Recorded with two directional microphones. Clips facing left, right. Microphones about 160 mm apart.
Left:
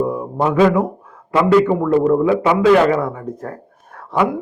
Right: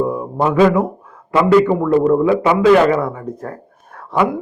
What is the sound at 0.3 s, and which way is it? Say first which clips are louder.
A man's voice: right 1 dB; 15° right (ahead or behind).